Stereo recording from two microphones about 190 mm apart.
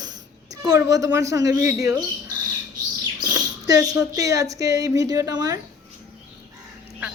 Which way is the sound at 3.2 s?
20° right (ahead or behind).